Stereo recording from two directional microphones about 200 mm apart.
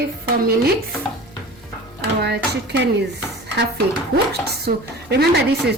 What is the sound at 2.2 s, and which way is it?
Dishes, 55° right (ahead or behind).